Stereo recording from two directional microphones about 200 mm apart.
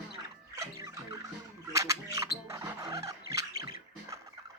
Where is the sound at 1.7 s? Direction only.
15° right (ahead or behind).